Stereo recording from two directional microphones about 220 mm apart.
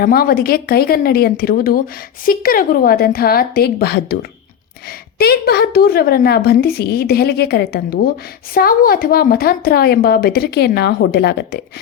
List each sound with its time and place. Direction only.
0.0 s a woman's voice: 45° left (ahead or behind)